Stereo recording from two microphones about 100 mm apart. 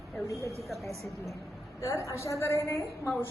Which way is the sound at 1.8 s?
30° left (ahead or behind).